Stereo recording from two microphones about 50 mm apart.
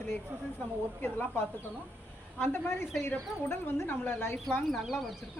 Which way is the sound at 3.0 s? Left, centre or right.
Left.